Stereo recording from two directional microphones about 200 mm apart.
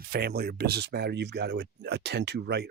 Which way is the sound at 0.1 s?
50° right (ahead or behind).